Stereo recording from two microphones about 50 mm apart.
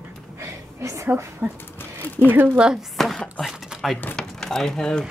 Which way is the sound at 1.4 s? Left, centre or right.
Centre.